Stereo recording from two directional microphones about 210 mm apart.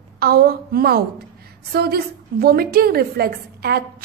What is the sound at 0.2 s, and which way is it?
A woman's voice, 45° right (ahead or behind).